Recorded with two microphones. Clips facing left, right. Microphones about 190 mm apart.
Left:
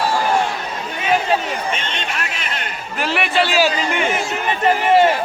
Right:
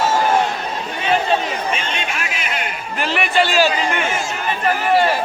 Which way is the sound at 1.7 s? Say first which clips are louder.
Right 1 dB; 10° right (ahead or behind).